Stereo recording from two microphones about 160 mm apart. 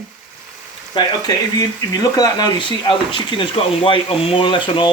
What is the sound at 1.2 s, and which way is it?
Speech, 25° left (ahead or behind).